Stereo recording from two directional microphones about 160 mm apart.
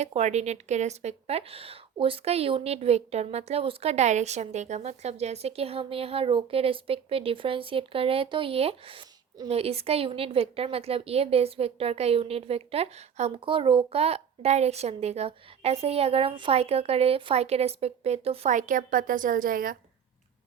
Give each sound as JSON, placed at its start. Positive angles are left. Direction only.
{"t": 0.0, "sound": "a woman's voice", "side_deg": -45}